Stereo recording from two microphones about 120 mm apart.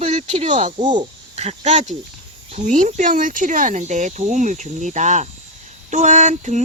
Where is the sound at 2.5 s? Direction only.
90° right.